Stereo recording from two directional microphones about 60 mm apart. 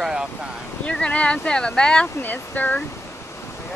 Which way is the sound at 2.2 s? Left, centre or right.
Left.